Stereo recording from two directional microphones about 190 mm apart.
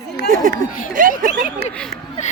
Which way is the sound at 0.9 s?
45° right (ahead or behind).